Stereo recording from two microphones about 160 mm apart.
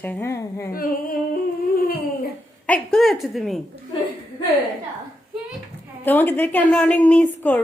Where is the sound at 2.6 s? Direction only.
5° left (ahead or behind).